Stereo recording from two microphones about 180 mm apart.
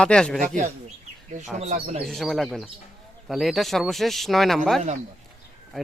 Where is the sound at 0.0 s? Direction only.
5° left (ahead or behind).